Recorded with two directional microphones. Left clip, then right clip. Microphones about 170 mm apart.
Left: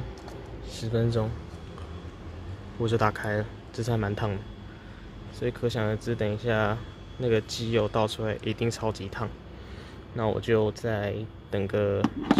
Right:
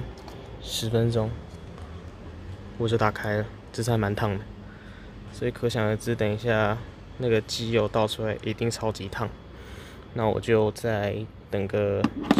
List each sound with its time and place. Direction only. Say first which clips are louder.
0.7 s a sound: right 9 dB; 25° right (ahead or behind)
0.9 s speech: right 2 dB; 10° right (ahead or behind)
2.8 s speech: right 1 dB; 5° right (ahead or behind)
5.4 s speech: right 2 dB; 10° right (ahead or behind)
12.0 s speech: right 1 dB; 30° right (ahead or behind)